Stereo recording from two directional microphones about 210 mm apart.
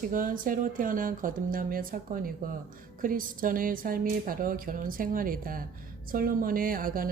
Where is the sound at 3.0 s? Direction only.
40° right (ahead or behind).